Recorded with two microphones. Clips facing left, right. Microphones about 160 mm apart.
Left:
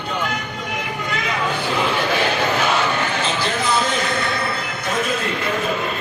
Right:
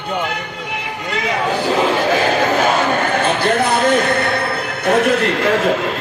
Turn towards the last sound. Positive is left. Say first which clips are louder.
# right 7 dB
turn(degrees=-90)